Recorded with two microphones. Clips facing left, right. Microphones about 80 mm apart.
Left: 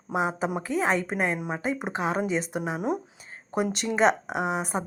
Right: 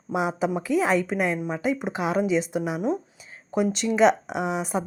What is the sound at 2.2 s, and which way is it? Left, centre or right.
Speech, left.